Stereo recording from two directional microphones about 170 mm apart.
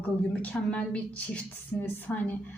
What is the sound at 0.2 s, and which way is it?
A woman's voice, 5° left (ahead or behind).